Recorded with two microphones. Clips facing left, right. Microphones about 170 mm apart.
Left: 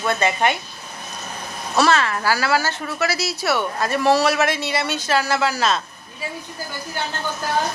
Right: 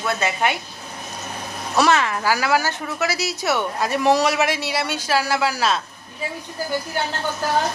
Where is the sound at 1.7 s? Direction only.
15° right (ahead or behind).